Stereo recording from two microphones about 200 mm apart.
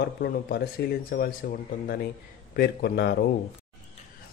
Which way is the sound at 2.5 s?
50° left (ahead or behind).